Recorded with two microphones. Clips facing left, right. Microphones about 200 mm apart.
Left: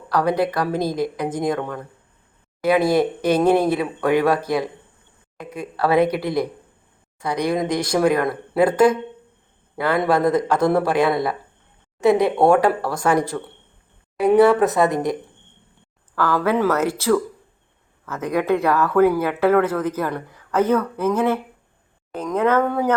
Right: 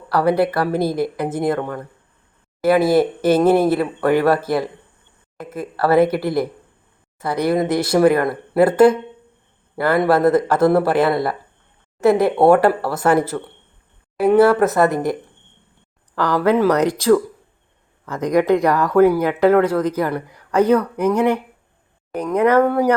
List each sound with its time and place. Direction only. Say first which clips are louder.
0.1 s speech: right 3 dB; 10° right (ahead or behind)
16.1 s speech: right 3 dB; 15° right (ahead or behind)